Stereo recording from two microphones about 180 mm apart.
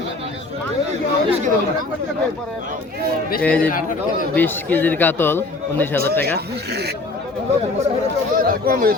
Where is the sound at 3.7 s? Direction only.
50° left (ahead or behind).